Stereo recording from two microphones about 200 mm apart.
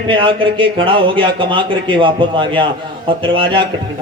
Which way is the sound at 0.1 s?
25° right (ahead or behind).